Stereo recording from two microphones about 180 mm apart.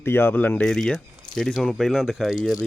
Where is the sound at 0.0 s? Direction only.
10° left (ahead or behind).